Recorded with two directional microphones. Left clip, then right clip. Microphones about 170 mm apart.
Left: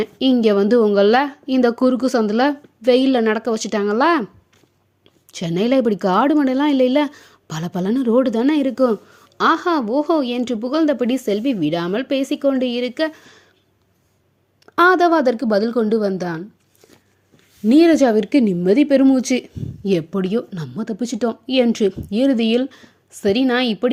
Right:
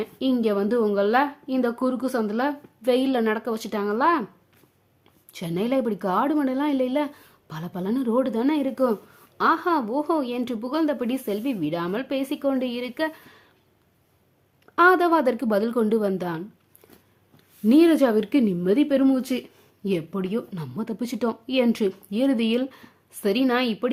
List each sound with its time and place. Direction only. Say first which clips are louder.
0.0 s speech: left 8 dB; 35° left (ahead or behind)
5.3 s a woman's voice: left 7 dB; 30° left (ahead or behind)
14.8 s a woman's voice: left 4 dB; 20° left (ahead or behind)
17.7 s a woman's voice: left 5 dB; 20° left (ahead or behind)